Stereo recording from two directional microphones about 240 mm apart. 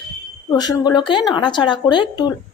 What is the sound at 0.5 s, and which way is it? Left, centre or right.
A woman's voice, centre.